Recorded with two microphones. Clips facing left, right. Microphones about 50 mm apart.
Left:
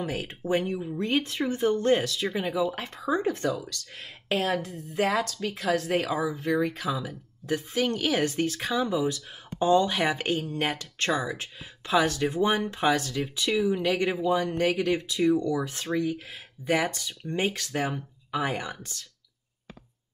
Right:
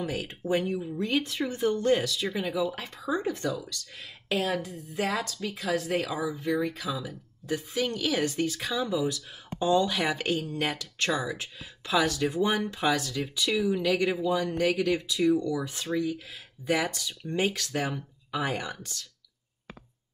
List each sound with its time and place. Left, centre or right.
0.0 s a woman's voice: left
15.4 s speech: left